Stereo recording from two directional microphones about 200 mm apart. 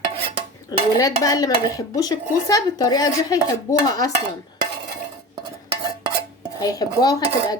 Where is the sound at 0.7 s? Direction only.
20° left (ahead or behind).